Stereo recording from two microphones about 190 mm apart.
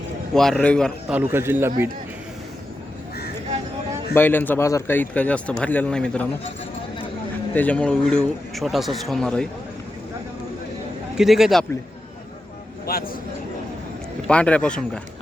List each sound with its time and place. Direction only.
0.3 s speech: 5° left (ahead or behind); by 1.7 s 10° right (ahead or behind)
4.1 s speech: 10° left (ahead or behind)
7.5 s speech: 10° left (ahead or behind)
11.2 s speech: centre (ahead or behind)
12.8 s a man's voice: 50° left (ahead or behind)
14.3 s speech: 5° left (ahead or behind)